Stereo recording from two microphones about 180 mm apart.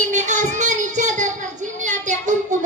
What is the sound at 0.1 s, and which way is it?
Child singing, 40° right (ahead or behind).